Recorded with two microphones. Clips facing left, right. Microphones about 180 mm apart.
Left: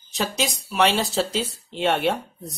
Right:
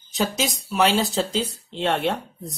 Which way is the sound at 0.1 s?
Centre (ahead or behind).